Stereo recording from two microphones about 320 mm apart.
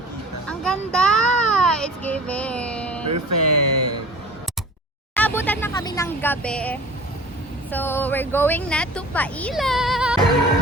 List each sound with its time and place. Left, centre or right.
0.4 s a child's voice: centre
3.1 s speech: right
5.1 s a woman's voice: centre